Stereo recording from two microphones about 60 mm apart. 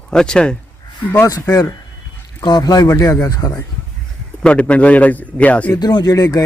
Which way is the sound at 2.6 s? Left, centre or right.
Left.